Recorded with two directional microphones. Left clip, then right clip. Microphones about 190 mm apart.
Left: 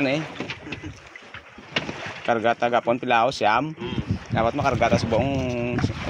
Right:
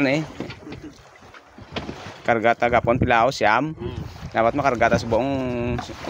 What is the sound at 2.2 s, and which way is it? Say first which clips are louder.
Speech: right 3 dB; 25° right (ahead or behind).